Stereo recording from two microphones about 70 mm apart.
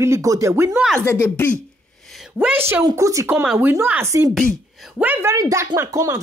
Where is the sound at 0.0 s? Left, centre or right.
Right.